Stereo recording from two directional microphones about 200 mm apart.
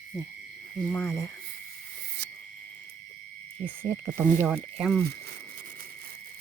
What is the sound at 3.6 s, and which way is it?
Speech, 10° right (ahead or behind).